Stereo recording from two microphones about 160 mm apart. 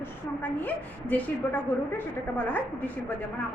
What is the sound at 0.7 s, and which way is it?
A woman's voice, 10° left (ahead or behind).